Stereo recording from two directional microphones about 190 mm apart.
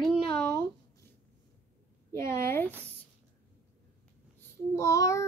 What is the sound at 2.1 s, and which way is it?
Speech, 15° left (ahead or behind).